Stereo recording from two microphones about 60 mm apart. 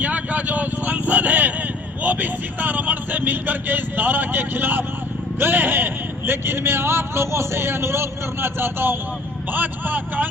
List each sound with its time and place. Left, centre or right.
0.0 s vehicle: right
5.4 s speech: right